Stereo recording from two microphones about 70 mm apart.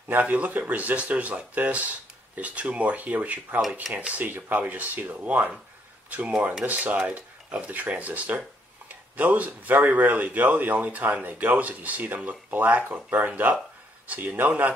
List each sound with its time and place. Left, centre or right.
0.1 s speech: right